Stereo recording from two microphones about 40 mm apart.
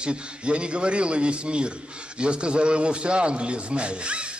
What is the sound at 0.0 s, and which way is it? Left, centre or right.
A man's voice, right.